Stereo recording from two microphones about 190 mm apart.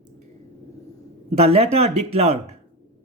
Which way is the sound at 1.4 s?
35° right (ahead or behind).